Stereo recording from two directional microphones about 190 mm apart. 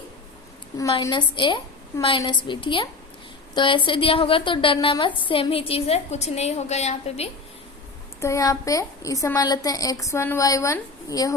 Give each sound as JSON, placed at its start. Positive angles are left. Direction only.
{"t": 1.0, "sound": "a woman's voice", "side_deg": 25}
{"t": 8.2, "sound": "a woman's voice", "side_deg": 15}